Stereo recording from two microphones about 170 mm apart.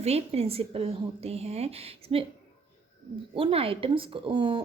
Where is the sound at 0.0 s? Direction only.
35° right (ahead or behind).